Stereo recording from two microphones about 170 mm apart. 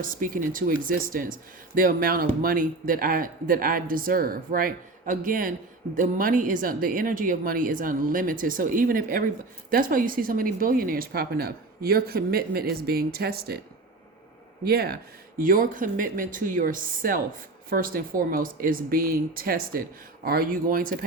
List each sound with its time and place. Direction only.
0.0 s a woman's voice: 55° right (ahead or behind)
14.6 s speech: 65° right (ahead or behind)
15.4 s a woman's voice: 55° right (ahead or behind)